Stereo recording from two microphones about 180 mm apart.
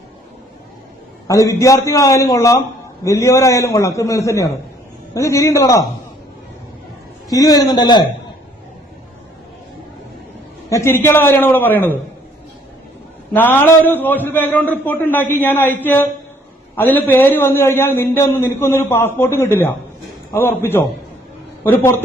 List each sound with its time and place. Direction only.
1.3 s a man's voice: 15° left (ahead or behind)
7.3 s a man's voice: 20° left (ahead or behind)
10.7 s a man's voice: 15° left (ahead or behind)
13.3 s a man's voice: 10° left (ahead or behind)